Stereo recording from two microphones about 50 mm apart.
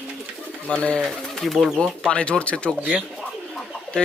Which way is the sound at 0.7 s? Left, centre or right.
Left.